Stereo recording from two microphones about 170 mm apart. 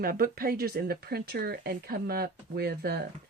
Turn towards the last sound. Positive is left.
turn(degrees=-65)  # may be behind; listen again after turning